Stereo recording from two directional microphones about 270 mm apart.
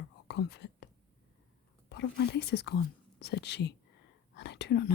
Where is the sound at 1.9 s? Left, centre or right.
Left.